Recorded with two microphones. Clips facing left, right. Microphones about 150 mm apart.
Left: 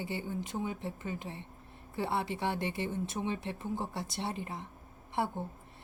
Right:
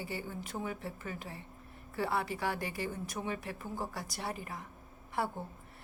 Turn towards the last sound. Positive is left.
turn(degrees=20)  # may be behind; listen again after turning